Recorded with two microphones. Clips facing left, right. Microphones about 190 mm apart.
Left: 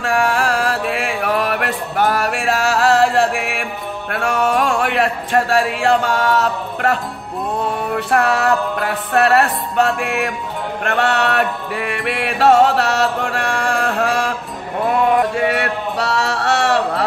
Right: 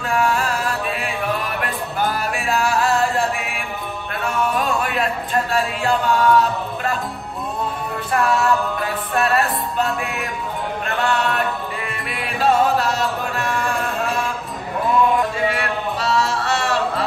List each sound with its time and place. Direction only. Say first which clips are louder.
0.0 s mantra: left 3 dB; 75° left (ahead or behind)
4.1 s speech: left 4 dB; 75° left (ahead or behind)
8.1 s music: left 2 dB; 70° left (ahead or behind)
15.0 s a sound: left 3 dB; 70° left (ahead or behind)